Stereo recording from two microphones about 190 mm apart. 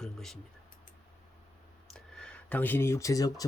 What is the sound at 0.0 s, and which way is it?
Speech, centre (ahead or behind).